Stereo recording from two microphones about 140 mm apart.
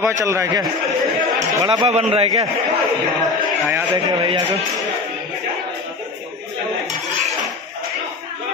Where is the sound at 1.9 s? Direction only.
45° right (ahead or behind).